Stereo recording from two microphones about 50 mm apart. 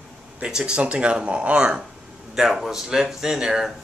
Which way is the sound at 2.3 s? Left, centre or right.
Centre.